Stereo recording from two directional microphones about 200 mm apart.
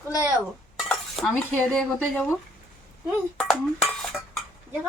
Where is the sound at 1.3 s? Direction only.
5° left (ahead or behind).